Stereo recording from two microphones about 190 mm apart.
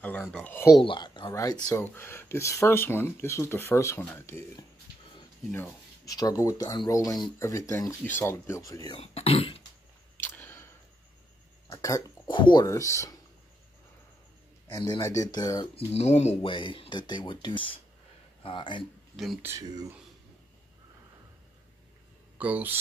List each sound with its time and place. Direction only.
0.0 s speech: 10° left (ahead or behind)
0.7 s speech: 25° left (ahead or behind)
10.1 s camera: 10° left (ahead or behind)
11.7 s speech: 15° left (ahead or behind)
14.7 s speech: 20° left (ahead or behind)
15.9 s speech: 35° left (ahead or behind)
19.4 s speech: 15° right (ahead or behind)
22.4 s speech: 10° right (ahead or behind)